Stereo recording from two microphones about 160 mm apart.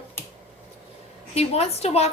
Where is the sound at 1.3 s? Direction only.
40° left (ahead or behind).